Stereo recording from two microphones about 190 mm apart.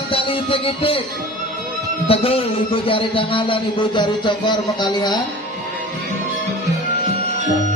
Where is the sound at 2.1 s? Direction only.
30° left (ahead or behind).